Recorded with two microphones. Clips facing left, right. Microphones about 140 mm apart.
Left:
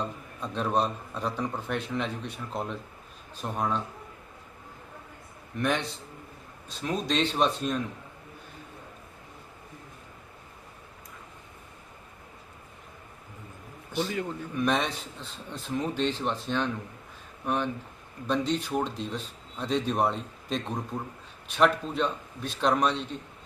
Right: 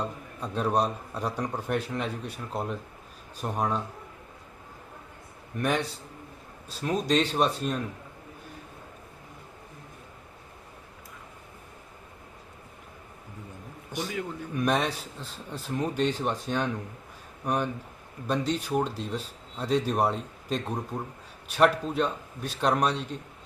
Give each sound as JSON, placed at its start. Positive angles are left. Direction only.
{"t": 0.0, "sound": "a man's voice", "side_deg": -10}
{"t": 5.5, "sound": "a man's voice", "side_deg": -10}
{"t": 13.9, "sound": "a man's voice", "side_deg": -15}